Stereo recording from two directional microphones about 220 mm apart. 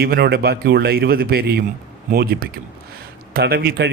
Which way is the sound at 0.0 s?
45° right (ahead or behind).